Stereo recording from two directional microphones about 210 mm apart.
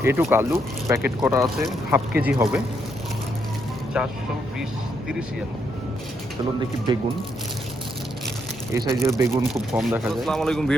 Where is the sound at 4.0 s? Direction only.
5° right (ahead or behind).